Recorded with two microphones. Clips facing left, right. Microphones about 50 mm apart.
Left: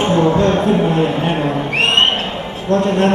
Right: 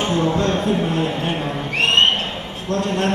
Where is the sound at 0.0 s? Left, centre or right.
Left.